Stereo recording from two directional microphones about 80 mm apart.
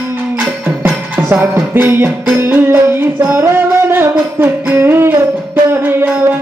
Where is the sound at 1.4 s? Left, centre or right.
Right.